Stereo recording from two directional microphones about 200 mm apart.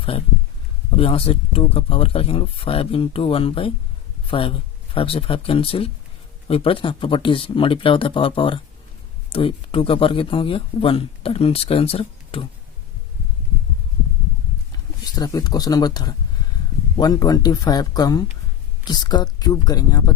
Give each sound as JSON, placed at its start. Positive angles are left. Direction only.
{"t": 0.0, "sound": "speech", "side_deg": 30}
{"t": 15.1, "sound": "speech", "side_deg": 20}